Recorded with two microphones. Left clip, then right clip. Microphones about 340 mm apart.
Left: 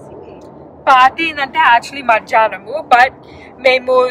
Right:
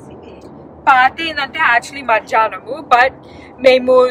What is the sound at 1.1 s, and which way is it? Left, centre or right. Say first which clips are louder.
A woman's voice: left 4 dB; centre.